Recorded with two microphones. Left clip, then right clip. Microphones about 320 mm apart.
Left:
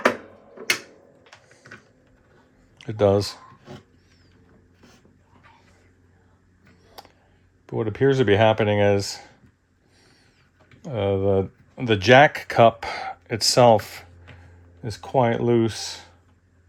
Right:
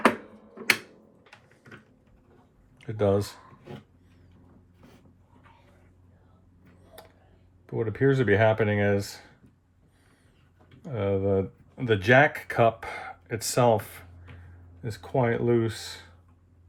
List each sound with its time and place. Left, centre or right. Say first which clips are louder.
2.7 s speech: left 6 dB; left
7.7 s speech: left 4 dB; left
10.8 s speech: left 5 dB; left